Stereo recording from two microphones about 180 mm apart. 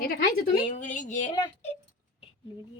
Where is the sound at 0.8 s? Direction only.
45° left (ahead or behind).